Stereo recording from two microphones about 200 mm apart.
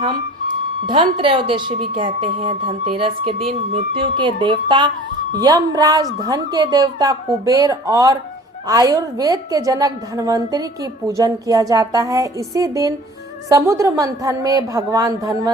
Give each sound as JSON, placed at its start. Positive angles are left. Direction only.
{"t": 0.9, "sound": "a woman's voice", "side_deg": -25}